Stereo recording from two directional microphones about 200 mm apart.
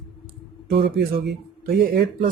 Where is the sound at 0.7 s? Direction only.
55° right (ahead or behind).